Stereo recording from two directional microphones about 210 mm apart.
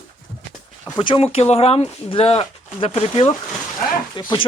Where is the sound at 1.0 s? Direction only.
25° left (ahead or behind).